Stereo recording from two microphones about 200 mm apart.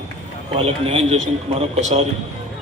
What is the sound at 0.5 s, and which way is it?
A man's voice, 30° right (ahead or behind).